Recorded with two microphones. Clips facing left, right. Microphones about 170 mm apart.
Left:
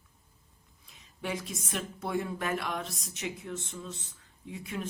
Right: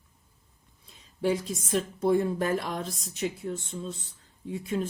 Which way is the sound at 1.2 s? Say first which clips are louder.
Right 8 dB; 35° right (ahead or behind).